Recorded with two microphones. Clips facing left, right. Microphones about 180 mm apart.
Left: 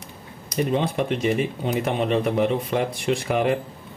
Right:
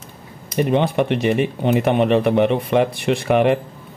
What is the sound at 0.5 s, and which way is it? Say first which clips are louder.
Speech: right 5 dB; 70° right (ahead or behind).